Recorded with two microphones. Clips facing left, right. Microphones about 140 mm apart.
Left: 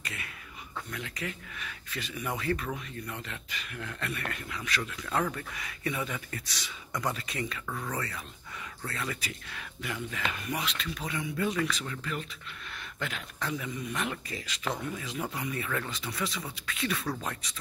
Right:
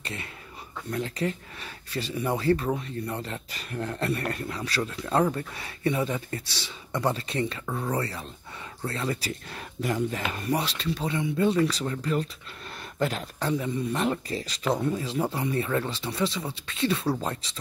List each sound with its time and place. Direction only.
0.0 s speech: 30° right (ahead or behind)